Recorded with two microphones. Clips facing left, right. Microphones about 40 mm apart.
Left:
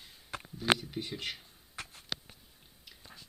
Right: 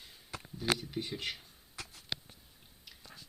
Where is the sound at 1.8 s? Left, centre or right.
Left.